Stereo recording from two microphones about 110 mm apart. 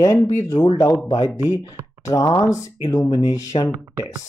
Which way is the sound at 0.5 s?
75° left (ahead or behind).